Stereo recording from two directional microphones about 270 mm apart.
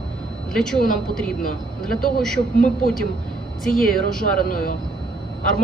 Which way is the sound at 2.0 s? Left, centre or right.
Centre.